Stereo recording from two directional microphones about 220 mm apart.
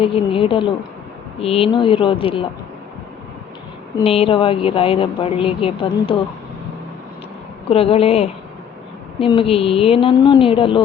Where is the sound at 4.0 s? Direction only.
25° left (ahead or behind).